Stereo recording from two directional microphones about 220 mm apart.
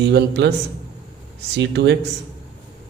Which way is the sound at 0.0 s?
50° right (ahead or behind).